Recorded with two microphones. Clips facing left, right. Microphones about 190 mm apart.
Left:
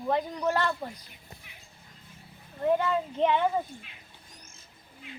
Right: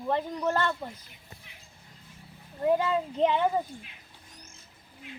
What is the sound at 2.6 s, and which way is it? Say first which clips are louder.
Speech: right 1 dB; 10° right (ahead or behind).